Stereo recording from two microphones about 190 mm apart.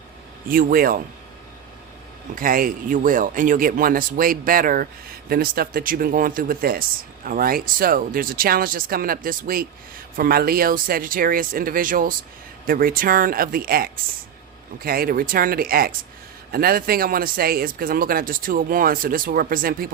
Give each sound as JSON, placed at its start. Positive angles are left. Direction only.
{"t": 0.4, "sound": "speech", "side_deg": -50}
{"t": 2.3, "sound": "speech", "side_deg": -45}